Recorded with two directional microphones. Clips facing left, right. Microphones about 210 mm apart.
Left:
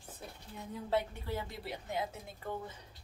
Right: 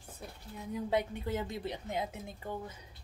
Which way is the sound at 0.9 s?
20° right (ahead or behind).